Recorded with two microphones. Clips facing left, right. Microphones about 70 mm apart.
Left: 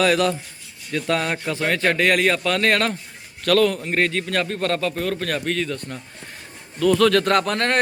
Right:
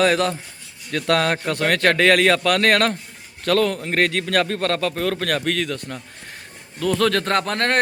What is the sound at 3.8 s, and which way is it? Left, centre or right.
A man's voice, right.